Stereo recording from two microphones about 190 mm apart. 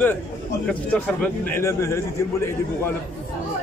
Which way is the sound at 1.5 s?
15° left (ahead or behind).